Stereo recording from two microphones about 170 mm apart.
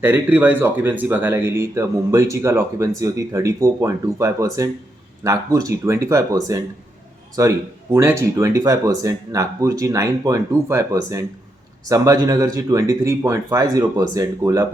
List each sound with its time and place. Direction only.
0.0 s speech: 10° right (ahead or behind)